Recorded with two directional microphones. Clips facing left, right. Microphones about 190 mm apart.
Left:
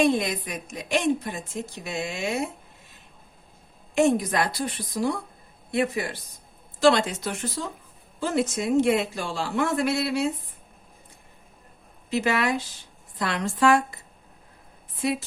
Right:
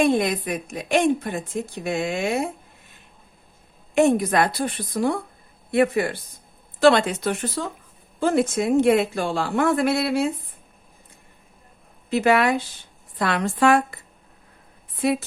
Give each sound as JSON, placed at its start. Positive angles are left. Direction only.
{"t": 0.0, "sound": "a woman's voice", "side_deg": -55}
{"t": 3.9, "sound": "a woman's voice", "side_deg": -60}
{"t": 7.6, "sound": "speech", "side_deg": -75}
{"t": 8.2, "sound": "a woman's voice", "side_deg": -55}
{"t": 12.1, "sound": "a woman's voice", "side_deg": -55}